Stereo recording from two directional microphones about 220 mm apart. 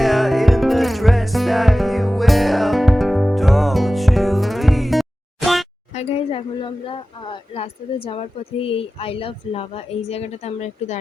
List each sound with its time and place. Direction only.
0.0 s music: centre (ahead or behind)
5.9 s speech: 30° left (ahead or behind)